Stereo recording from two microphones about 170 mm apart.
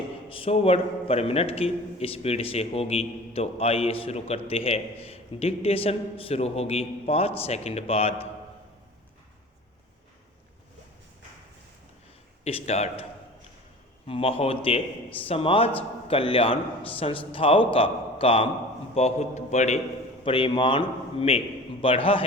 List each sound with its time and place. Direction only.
0.3 s a man's voice: 35° left (ahead or behind)
12.5 s a man's voice: 35° left (ahead or behind)
14.1 s a man's voice: 35° left (ahead or behind)
20.2 s a man's voice: 30° left (ahead or behind)